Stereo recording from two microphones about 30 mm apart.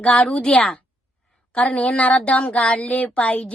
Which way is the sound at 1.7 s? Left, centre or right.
Left.